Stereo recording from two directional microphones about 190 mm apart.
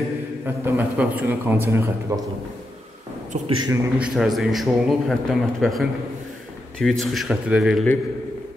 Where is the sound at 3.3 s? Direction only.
40° right (ahead or behind).